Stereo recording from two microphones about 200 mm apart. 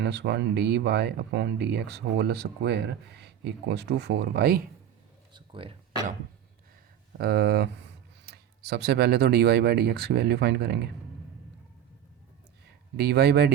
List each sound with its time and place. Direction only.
0.0 s speech: 60° right (ahead or behind)
5.3 s a sound: 25° right (ahead or behind)
7.2 s speech: 50° right (ahead or behind)
13.0 s speech: 55° right (ahead or behind)